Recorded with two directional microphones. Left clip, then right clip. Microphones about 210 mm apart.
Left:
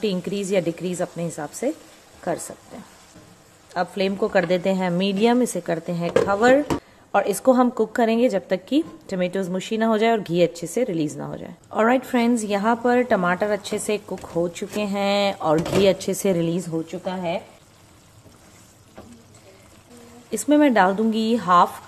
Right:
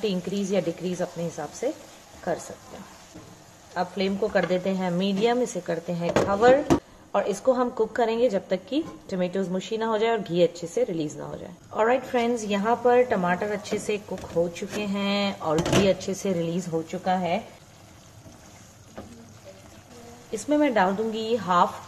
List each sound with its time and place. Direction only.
0.0 s a woman's voice: 50° left (ahead or behind)
3.7 s a woman's voice: 55° left (ahead or behind)
17.0 s speech: 35° left (ahead or behind)
20.2 s a woman's voice: 50° left (ahead or behind)